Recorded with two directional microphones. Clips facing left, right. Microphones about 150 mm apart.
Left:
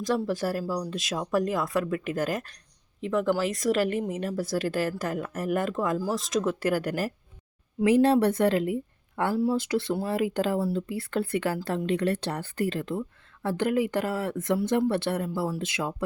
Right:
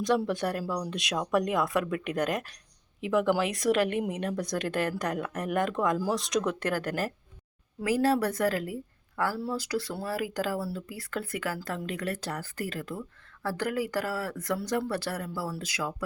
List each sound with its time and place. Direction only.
0.0 s speech: centre (ahead or behind)
7.8 s speech: 25° left (ahead or behind)